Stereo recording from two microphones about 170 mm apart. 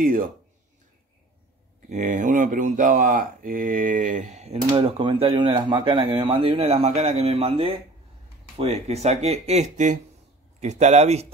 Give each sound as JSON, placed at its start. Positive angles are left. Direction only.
{"t": 0.0, "sound": "speech", "side_deg": -55}
{"t": 1.9, "sound": "speech", "side_deg": -45}